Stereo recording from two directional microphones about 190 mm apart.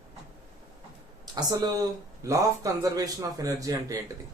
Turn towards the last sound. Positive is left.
turn(degrees=-15)  # may be behind; listen again after turning